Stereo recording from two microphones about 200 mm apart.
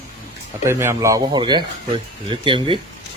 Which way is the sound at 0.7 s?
10° right (ahead or behind).